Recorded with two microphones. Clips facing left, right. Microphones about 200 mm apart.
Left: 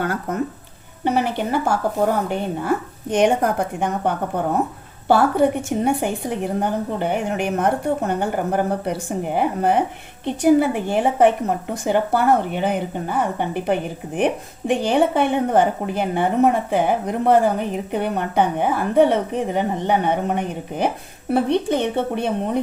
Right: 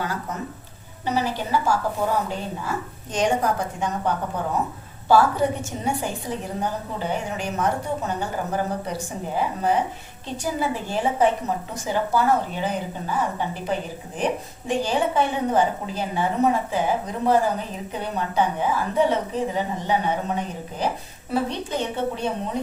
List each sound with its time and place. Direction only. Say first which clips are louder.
0.0 s a woman's voice: left 6 dB; 55° left (ahead or behind)